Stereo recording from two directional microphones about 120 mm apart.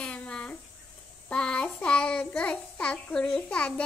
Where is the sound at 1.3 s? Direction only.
10° left (ahead or behind).